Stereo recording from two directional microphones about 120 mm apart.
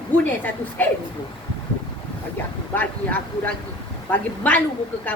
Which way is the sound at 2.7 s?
15° left (ahead or behind).